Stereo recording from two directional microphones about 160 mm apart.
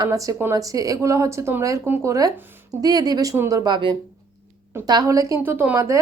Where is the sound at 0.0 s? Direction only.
20° right (ahead or behind).